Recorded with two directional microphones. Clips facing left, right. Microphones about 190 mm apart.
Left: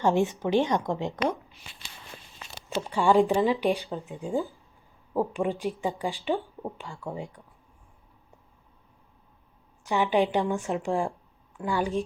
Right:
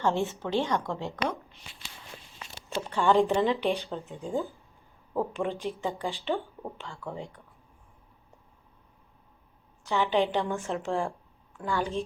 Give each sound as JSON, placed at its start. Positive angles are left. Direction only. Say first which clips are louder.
{"t": 0.0, "sound": "a woman's voice", "louder": "left 4 dB", "side_deg": 15}
{"t": 2.6, "sound": "a woman's voice", "louder": "left 2 dB", "side_deg": 15}
{"t": 3.8, "sound": "speech", "louder": "left 2 dB", "side_deg": 0}
{"t": 5.1, "sound": "a woman's voice", "louder": "left 3 dB", "side_deg": 15}
{"t": 9.8, "sound": "a woman's voice", "louder": "left 2 dB", "side_deg": 15}